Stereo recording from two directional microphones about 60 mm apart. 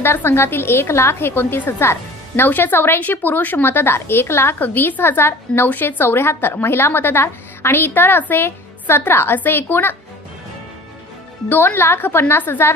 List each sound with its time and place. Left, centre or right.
0.0 s a woman's voice: left
3.6 s a woman's voice: left
4.6 s a woman's voice: left
11.4 s a woman's voice: left